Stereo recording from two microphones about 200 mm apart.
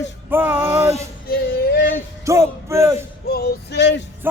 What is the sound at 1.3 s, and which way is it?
Music, 50° left (ahead or behind).